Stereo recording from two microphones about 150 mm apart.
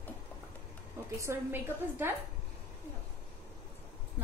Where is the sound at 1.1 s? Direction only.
15° right (ahead or behind).